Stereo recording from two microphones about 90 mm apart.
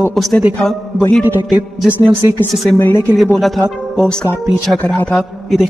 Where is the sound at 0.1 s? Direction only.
5° left (ahead or behind).